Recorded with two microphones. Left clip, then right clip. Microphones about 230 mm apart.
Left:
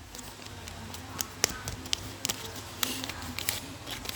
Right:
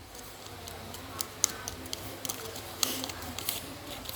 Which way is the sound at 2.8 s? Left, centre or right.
Left.